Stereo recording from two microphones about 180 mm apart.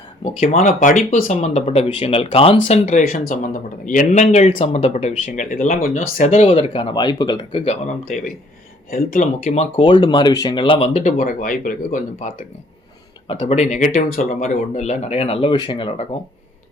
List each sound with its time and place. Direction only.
0.3 s speech: 45° left (ahead or behind)
6.4 s speech: 30° left (ahead or behind)
8.9 s speech: 50° left (ahead or behind)
11.2 s speech: 50° left (ahead or behind)
13.4 s speech: 35° left (ahead or behind)